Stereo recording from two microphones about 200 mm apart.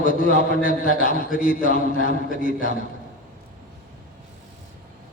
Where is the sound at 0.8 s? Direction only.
40° left (ahead or behind).